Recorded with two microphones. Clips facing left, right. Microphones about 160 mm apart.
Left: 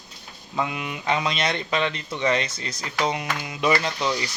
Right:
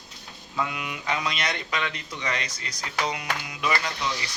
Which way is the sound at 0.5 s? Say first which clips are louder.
Left 3 dB; 25° left (ahead or behind).